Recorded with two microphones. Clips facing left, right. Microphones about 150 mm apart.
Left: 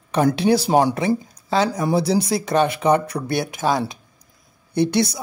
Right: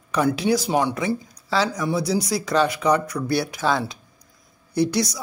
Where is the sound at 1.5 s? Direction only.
20° left (ahead or behind).